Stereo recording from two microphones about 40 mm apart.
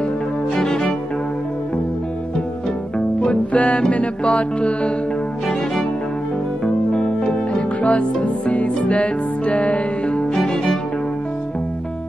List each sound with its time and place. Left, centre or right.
0.6 s cello: centre
3.2 s music: left
6.6 s music: left
10.3 s music: centre